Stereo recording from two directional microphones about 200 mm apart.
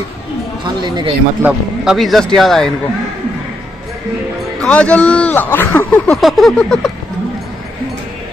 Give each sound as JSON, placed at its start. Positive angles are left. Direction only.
{"t": 0.8, "sound": "speech", "side_deg": -20}
{"t": 1.4, "sound": "a man's voice", "side_deg": 0}
{"t": 4.6, "sound": "speech", "side_deg": 5}